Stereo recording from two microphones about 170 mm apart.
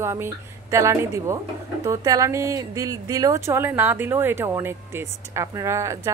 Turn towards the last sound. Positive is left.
turn(degrees=-15)  # may be behind; listen again after turning